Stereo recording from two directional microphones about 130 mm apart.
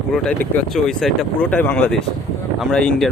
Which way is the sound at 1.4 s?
15° left (ahead or behind).